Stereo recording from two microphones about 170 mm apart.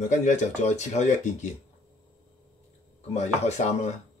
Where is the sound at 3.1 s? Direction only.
40° left (ahead or behind).